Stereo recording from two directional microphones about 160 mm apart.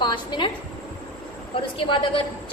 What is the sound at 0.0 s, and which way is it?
Speech, 30° left (ahead or behind).